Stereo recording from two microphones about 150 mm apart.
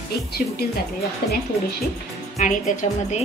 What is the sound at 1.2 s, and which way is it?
Speech, 90° left.